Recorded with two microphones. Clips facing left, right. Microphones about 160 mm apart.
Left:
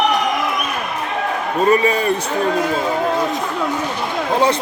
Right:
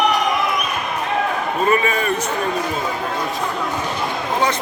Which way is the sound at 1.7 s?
35° left (ahead or behind).